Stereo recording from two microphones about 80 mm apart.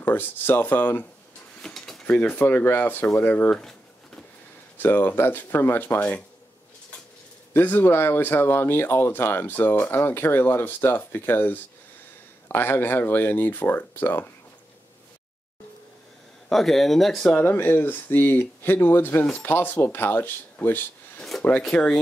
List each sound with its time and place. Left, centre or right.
0.0 s speech: left
1.6 s a sound: centre
2.0 s speech: centre
4.7 s speech: left
7.5 s speech: left
16.4 s speech: centre
17.4 s speech: left
21.2 s filing: centre
21.6 s speech: centre